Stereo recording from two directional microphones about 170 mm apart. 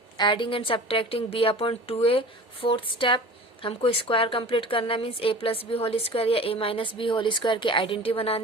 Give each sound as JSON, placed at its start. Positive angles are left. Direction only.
{"t": 0.2, "sound": "a woman's voice", "side_deg": 30}